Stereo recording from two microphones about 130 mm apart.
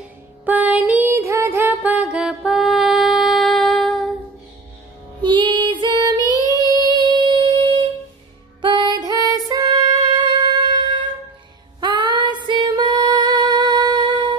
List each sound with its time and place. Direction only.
0.5 s music: 10° right (ahead or behind)
5.2 s music: 35° right (ahead or behind)